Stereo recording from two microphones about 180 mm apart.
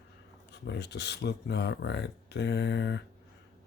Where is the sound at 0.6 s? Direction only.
70° left (ahead or behind).